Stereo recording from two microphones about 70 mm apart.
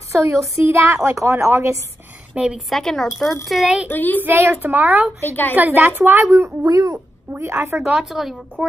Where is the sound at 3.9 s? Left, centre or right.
Left.